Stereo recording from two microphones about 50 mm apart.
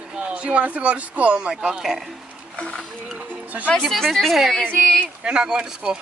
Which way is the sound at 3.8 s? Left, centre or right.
Centre.